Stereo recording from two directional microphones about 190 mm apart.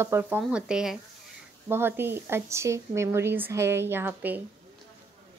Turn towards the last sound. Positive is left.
turn(degrees=-10)  # may be behind; listen again after turning